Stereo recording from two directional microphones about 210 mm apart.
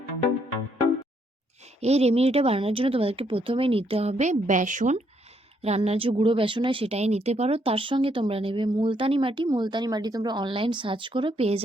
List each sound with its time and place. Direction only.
1.8 s speech: 30° right (ahead or behind)